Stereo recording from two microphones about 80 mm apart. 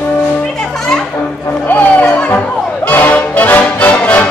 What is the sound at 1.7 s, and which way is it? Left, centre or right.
Music, left.